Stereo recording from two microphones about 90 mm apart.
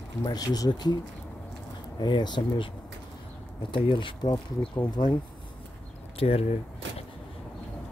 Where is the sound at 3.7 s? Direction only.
70° left (ahead or behind).